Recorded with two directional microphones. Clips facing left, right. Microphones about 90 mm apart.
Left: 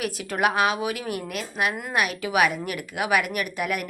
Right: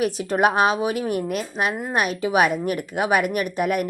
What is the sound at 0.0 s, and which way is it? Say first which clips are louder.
A woman's voice: right 5 dB; 30° right (ahead or behind).